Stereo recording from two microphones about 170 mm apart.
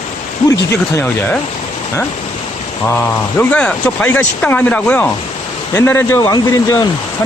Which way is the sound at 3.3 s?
10° left (ahead or behind).